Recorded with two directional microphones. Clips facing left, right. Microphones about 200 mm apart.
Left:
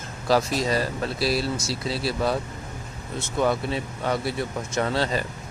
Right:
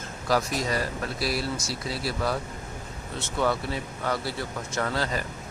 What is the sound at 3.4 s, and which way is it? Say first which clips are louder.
Speech: left 3 dB; 20° left (ahead or behind).